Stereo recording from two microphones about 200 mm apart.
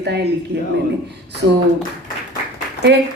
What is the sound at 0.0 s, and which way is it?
Speech, 55° right (ahead or behind).